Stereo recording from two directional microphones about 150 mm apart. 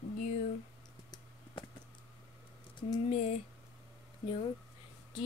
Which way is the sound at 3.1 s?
45° left (ahead or behind).